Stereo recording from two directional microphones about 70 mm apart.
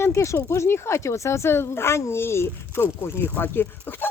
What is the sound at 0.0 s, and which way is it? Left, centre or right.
Speech, left.